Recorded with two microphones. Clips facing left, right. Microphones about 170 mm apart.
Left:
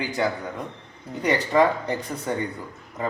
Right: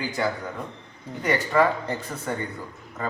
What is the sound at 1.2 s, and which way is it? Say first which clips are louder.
Speech: left 2 dB; 20° left (ahead or behind).